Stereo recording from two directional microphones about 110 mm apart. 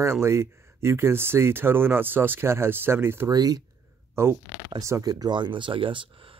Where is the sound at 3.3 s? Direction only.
35° right (ahead or behind).